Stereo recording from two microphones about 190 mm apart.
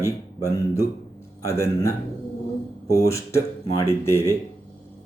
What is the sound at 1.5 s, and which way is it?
Speech, 15° left (ahead or behind).